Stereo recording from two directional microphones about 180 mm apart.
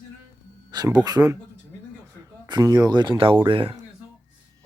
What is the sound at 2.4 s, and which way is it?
Speech, 25° right (ahead or behind).